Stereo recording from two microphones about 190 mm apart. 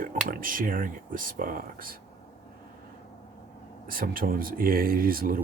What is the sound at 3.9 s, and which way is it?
Speech, 50° right (ahead or behind).